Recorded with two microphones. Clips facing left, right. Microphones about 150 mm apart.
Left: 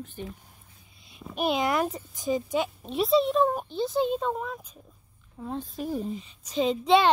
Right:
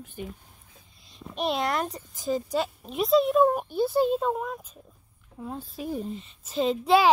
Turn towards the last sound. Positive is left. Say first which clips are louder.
# even
turn(degrees=-5)  # may be behind; listen again after turning